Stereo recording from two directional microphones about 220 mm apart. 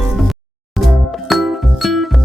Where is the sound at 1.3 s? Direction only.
Centre (ahead or behind).